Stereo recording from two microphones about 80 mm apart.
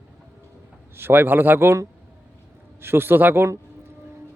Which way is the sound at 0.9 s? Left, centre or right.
Right.